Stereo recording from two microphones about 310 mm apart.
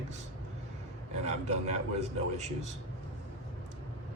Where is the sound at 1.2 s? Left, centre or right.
Right.